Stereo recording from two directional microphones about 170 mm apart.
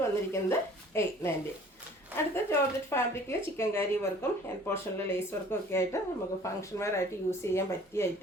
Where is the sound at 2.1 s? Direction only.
10° right (ahead or behind).